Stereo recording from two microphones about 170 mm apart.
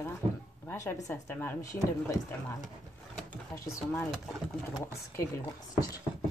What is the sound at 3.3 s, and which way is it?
Drawer open or close, 20° left (ahead or behind).